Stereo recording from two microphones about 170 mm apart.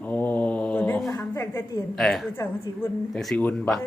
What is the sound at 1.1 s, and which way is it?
Speech, 15° left (ahead or behind).